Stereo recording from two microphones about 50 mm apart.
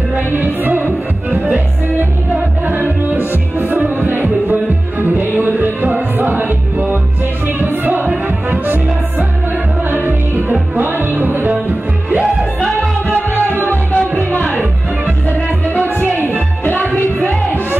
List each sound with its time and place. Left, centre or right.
0.3 s music: right
2.6 s music: right
9.8 s music: right
12.4 s music: centre
13.3 s music: right
13.9 s music: left